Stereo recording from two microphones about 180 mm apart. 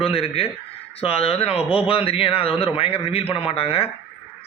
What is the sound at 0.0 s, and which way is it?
A man's voice, 30° left (ahead or behind).